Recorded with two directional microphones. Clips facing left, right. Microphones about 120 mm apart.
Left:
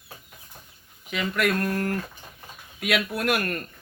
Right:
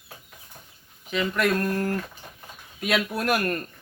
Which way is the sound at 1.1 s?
30° right (ahead or behind).